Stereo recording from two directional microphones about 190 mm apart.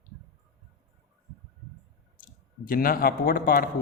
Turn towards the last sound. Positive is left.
turn(degrees=50)  # may be behind; listen again after turning